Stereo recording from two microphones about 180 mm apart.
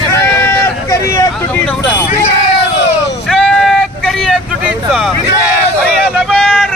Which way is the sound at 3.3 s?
Centre (ahead or behind).